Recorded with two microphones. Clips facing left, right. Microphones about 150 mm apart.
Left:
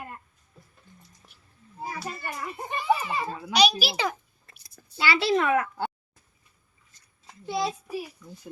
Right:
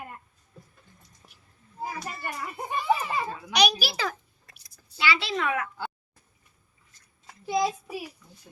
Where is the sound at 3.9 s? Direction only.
20° left (ahead or behind).